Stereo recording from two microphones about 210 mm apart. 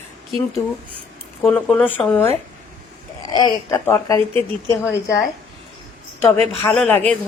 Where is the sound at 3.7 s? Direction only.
10° left (ahead or behind).